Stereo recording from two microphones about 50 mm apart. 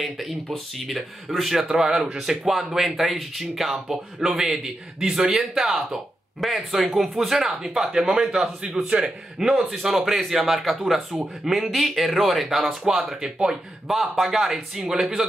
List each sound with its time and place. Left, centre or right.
0.0 s speech: centre
8.8 s a man's voice: right
9.4 s speech: centre